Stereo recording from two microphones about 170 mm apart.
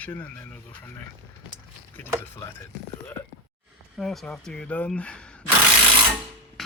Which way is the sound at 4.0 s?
Centre (ahead or behind).